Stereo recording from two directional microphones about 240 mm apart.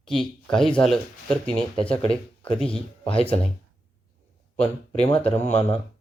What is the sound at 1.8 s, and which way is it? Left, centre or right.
Speech, left.